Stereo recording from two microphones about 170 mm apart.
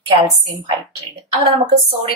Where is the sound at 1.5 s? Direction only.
35° right (ahead or behind).